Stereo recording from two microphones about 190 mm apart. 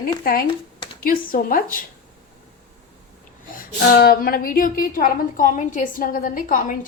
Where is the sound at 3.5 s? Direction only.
55° left (ahead or behind).